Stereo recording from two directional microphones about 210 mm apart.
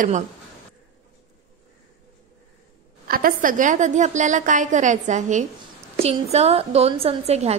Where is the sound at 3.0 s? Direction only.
45° right (ahead or behind).